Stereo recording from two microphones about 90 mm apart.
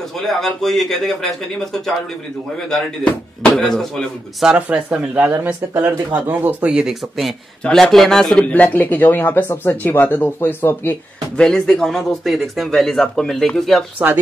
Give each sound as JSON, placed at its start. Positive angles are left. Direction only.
{"t": 0.2, "sound": "speech", "side_deg": 5}
{"t": 4.6, "sound": "speech", "side_deg": -20}
{"t": 6.9, "sound": "speech", "side_deg": 0}
{"t": 8.5, "sound": "speech", "side_deg": 15}
{"t": 11.3, "sound": "speech", "side_deg": 5}
{"t": 13.9, "sound": "speech", "side_deg": -25}